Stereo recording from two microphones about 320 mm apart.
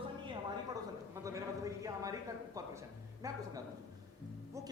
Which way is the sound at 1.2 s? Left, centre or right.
Centre.